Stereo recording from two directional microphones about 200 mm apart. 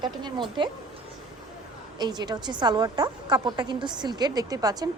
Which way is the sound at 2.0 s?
20° right (ahead or behind).